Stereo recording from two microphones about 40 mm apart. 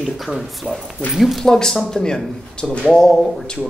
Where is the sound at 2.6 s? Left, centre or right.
Left.